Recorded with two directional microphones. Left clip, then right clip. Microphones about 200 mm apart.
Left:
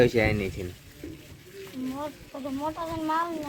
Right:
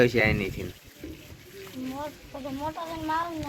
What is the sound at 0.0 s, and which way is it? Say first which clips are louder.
Speech: even; 5° left (ahead or behind).